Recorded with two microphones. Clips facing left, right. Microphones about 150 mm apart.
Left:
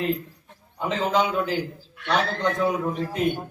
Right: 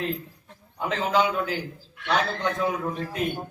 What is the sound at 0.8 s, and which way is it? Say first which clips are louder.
A man's voice: left 1 dB; centre (ahead or behind).